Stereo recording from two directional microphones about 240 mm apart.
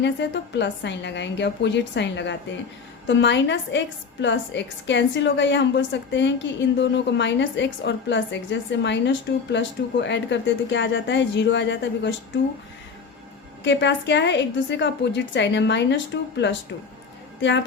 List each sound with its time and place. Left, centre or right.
0.0 s a woman's voice: left
13.7 s a woman's voice: left